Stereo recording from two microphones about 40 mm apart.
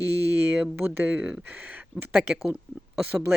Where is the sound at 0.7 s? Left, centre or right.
Right.